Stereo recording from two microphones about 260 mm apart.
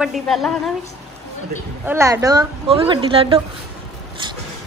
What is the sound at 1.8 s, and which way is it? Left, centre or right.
A woman's voice, centre.